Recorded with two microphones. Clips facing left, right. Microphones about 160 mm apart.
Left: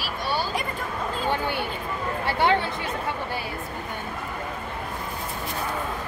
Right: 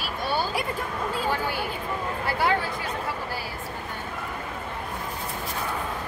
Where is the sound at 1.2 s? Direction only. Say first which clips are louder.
Left 4 dB; 25° left (ahead or behind).